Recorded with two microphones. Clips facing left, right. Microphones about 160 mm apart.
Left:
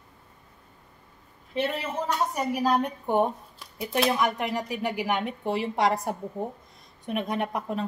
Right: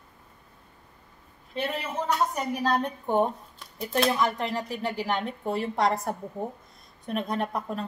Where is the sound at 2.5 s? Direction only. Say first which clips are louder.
Left 2 dB; 10° left (ahead or behind).